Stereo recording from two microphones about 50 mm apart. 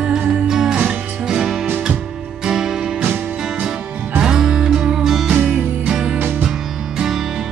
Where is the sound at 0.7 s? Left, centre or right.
Right.